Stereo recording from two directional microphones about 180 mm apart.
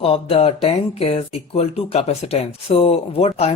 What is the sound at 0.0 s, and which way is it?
Speech, 30° left (ahead or behind).